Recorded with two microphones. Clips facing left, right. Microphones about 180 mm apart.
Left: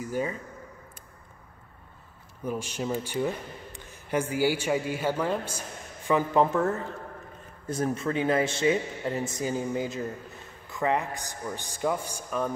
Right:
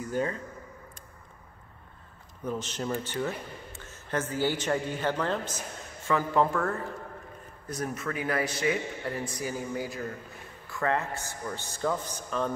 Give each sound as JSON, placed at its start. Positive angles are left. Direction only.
{"t": 0.0, "sound": "speech", "side_deg": 10}
{"t": 2.4, "sound": "a man's voice", "side_deg": 10}